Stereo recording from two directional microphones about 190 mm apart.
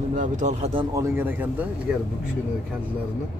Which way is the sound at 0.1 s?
40° right (ahead or behind).